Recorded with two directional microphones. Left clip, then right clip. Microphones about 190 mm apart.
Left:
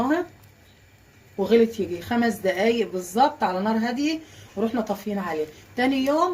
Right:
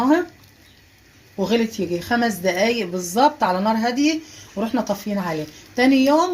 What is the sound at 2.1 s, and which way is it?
A woman's voice, 45° right (ahead or behind).